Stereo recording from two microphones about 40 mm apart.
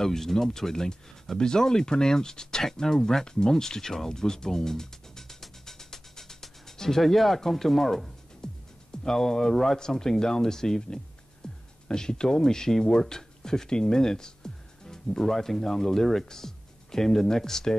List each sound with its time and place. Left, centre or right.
0.0 s speech: centre
8.4 s music: centre
8.9 s speech: centre